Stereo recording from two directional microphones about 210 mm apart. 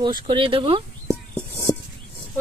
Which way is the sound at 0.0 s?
20° right (ahead or behind).